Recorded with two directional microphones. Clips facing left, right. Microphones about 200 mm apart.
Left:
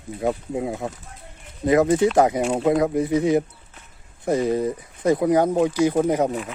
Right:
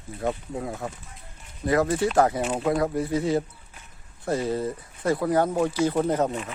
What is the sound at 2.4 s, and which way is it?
Speech, 25° left (ahead or behind).